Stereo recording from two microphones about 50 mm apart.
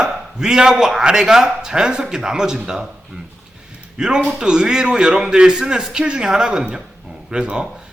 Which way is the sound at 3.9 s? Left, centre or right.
Centre.